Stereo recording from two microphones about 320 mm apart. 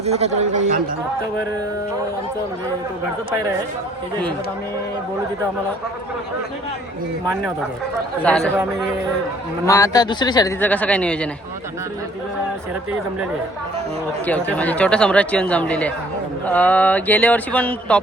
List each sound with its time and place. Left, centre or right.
0.0 s speech: centre
8.2 s speech: centre
9.6 s speech: centre
14.3 s speech: centre